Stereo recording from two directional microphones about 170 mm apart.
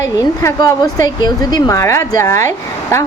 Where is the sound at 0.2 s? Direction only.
20° left (ahead or behind).